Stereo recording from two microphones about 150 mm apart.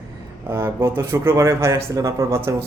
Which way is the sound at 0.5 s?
15° right (ahead or behind).